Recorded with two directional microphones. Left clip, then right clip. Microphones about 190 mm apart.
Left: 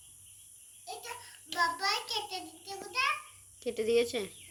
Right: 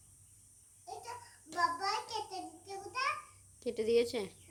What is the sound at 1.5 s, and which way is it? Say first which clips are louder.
Child singing: left 3 dB; 10° right (ahead or behind).